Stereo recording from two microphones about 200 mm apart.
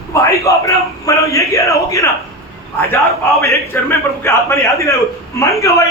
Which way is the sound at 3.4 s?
15° left (ahead or behind).